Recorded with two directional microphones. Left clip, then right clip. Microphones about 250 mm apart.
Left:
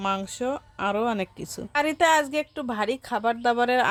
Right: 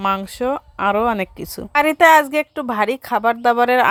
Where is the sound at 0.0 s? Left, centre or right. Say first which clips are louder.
Right 7 dB; centre.